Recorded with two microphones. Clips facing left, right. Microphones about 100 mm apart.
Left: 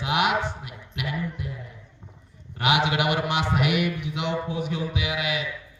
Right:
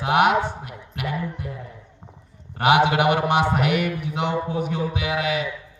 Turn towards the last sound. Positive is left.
turn(degrees=-35)  # may be behind; listen again after turning